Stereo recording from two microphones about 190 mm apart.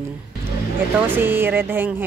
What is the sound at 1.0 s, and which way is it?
A woman's voice, 10° right (ahead or behind).